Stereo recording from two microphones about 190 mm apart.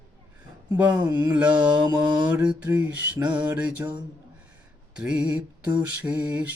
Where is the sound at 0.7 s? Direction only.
5° right (ahead or behind).